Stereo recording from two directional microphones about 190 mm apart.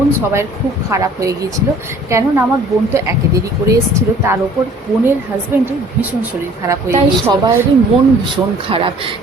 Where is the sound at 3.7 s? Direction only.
15° right (ahead or behind).